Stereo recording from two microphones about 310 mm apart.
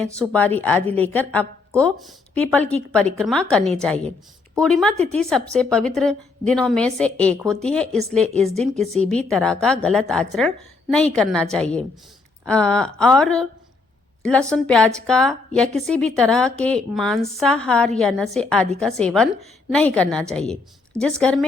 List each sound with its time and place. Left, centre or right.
0.0 s a woman's voice: centre
4.9 s a woman's voice: right
5.2 s a woman's voice: centre
9.0 s a woman's voice: centre
12.5 s a woman's voice: centre